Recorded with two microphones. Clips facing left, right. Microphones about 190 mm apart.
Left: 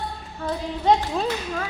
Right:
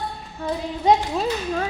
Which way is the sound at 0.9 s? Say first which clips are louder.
Right 1 dB; 15° right (ahead or behind).